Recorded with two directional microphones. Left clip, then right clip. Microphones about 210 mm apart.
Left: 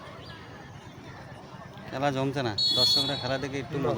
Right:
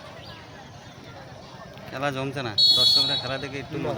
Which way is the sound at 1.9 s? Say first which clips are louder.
Even; 15° left (ahead or behind).